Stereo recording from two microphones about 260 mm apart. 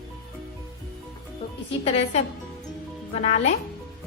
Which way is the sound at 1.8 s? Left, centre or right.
Left.